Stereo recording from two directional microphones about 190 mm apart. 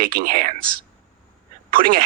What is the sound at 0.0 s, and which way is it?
Speech, 50° right (ahead or behind).